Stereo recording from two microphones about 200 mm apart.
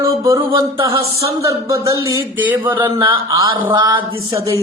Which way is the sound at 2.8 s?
25° right (ahead or behind).